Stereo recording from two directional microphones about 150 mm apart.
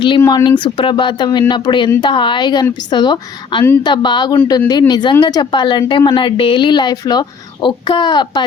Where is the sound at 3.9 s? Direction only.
30° left (ahead or behind).